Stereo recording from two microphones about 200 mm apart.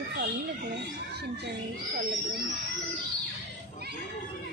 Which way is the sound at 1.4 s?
55° right (ahead or behind).